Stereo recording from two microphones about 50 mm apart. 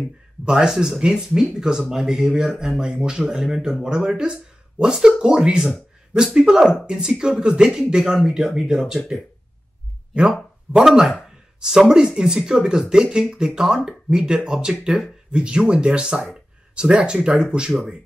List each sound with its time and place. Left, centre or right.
0.5 s speech: centre
10.8 s speech: centre